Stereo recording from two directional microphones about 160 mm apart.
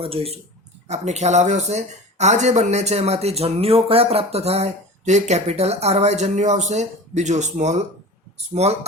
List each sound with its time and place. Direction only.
0.0 s speech: 35° right (ahead or behind)